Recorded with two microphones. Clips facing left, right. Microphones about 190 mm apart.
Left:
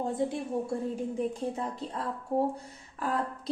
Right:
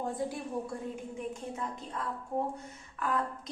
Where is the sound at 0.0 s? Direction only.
25° left (ahead or behind).